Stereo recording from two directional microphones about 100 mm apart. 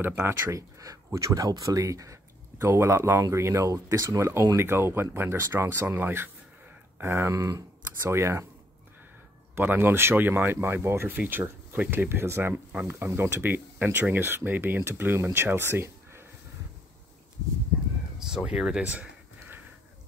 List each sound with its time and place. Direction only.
0.0 s speech: 20° right (ahead or behind)
7.3 s speech: 35° right (ahead or behind)
8.0 s speech: 25° right (ahead or behind)
9.6 s speech: 20° right (ahead or behind)
17.7 s a sound: 10° right (ahead or behind)
18.3 s speech: 5° right (ahead or behind)